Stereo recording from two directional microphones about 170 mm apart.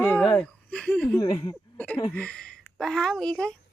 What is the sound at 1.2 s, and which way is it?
Speech, 20° left (ahead or behind).